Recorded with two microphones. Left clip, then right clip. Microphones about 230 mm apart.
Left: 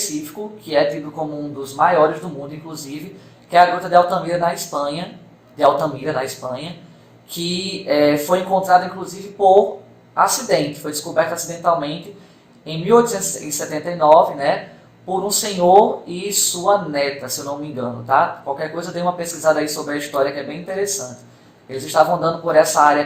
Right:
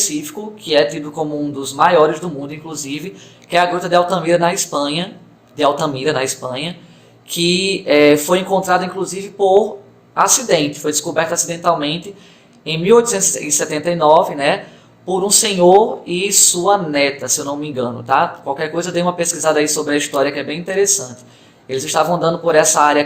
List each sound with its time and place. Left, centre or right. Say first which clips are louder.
0.6 s speech: right 3 dB; right
7.9 s speech: right 4 dB; right